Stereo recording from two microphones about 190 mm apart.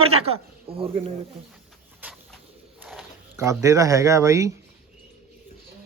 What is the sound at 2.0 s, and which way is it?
Bird, 10° right (ahead or behind).